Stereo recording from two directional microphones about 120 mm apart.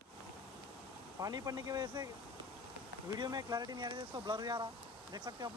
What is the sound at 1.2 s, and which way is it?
Speech, 30° right (ahead or behind).